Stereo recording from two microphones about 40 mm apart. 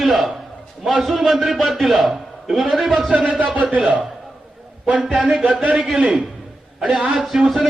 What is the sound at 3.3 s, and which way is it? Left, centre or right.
Speech, right.